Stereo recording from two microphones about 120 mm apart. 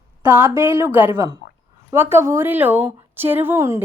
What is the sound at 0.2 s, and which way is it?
A woman's voice, 20° right (ahead or behind).